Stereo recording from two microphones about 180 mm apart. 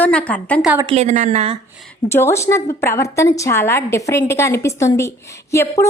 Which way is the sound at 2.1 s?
15° left (ahead or behind).